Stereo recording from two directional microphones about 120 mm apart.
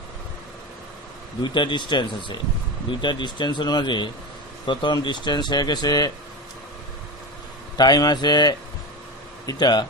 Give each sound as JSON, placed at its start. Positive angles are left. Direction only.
{"t": 1.4, "sound": "speech", "side_deg": 40}
{"t": 7.7, "sound": "speech", "side_deg": 35}